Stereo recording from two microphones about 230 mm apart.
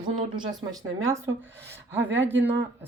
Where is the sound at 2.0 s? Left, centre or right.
Right.